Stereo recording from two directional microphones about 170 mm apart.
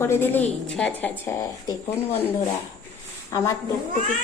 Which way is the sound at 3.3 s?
15° left (ahead or behind).